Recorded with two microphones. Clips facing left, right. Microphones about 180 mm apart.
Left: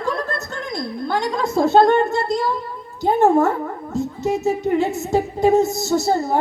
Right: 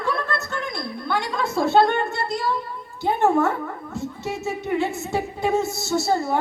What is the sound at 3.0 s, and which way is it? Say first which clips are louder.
A woman's voice: left 4 dB; 40° left (ahead or behind).